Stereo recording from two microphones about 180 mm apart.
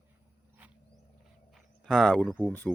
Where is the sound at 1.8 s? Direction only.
Centre (ahead or behind).